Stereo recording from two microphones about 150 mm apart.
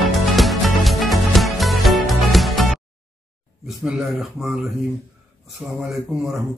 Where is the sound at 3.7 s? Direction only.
5° right (ahead or behind).